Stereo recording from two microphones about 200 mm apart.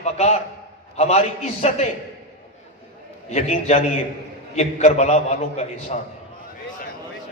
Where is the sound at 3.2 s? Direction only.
35° left (ahead or behind).